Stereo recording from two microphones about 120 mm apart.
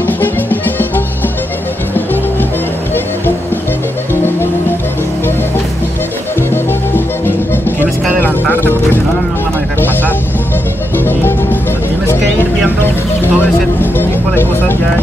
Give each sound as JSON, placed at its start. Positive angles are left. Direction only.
{"t": 0.0, "sound": "music", "side_deg": 15}
{"t": 4.1, "sound": "music", "side_deg": 20}
{"t": 7.2, "sound": "music", "side_deg": 15}
{"t": 13.2, "sound": "music", "side_deg": 15}